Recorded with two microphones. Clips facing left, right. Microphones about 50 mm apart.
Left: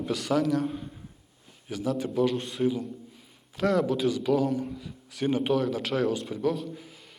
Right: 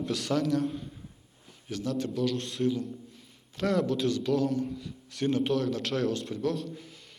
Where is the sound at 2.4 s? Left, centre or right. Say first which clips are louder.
Left 2 dB; centre.